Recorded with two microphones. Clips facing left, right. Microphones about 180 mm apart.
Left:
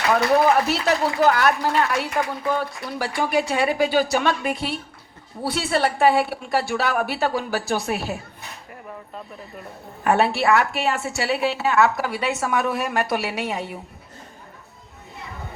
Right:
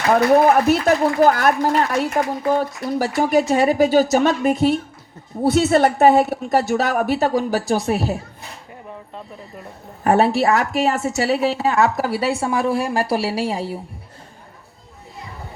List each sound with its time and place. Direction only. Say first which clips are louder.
0.1 s a woman's voice: right 4 dB; 45° right (ahead or behind)
10.0 s a woman's voice: right 4 dB; 35° right (ahead or behind)